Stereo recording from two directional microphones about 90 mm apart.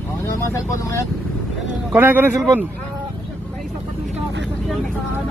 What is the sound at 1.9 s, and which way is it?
Speech, 20° right (ahead or behind).